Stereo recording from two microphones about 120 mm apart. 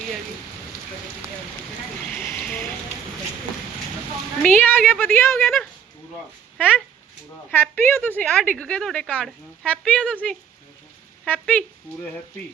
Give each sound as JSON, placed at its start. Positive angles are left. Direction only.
{"t": 2.1, "sound": "a sound", "side_deg": 15}
{"t": 4.4, "sound": "speech", "side_deg": 15}
{"t": 6.6, "sound": "speech", "side_deg": 10}